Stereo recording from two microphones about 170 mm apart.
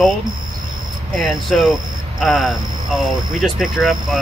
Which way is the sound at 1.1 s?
Centre (ahead or behind).